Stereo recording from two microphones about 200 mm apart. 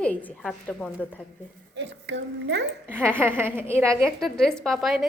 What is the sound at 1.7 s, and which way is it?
Speech, 65° right (ahead or behind).